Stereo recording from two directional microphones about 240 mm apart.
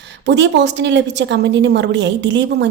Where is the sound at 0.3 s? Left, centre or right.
Right.